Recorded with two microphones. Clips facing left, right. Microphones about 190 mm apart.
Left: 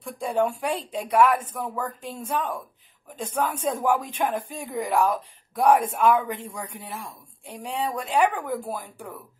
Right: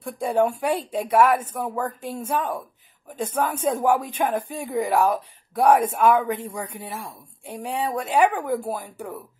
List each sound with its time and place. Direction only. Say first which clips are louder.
0.0 s speech: right 3 dB; 5° right (ahead or behind)